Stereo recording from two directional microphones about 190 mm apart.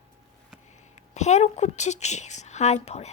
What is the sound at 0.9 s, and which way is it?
A woman's voice, 35° left (ahead or behind).